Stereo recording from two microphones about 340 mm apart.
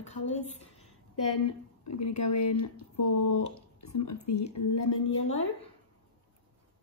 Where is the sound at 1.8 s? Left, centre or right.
Left.